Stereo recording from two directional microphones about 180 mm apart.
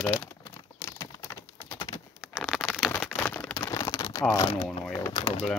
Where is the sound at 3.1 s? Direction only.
10° left (ahead or behind).